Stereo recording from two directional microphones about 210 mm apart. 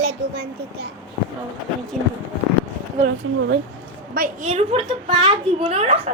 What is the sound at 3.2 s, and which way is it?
Speech, 75° right (ahead or behind).